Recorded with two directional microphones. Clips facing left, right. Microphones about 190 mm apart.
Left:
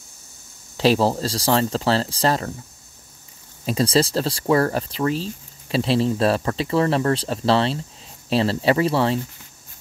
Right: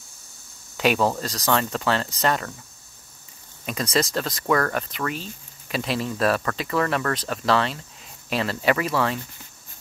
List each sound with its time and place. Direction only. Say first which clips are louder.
0.7 s speech: left 3 dB; 30° left (ahead or behind)
3.6 s speech: left 5 dB; 30° left (ahead or behind)